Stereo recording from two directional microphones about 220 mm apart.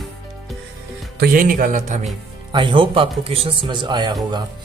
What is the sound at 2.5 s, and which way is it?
Speech, 20° right (ahead or behind).